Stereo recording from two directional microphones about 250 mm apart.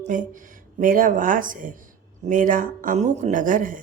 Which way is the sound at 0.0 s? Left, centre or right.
Right.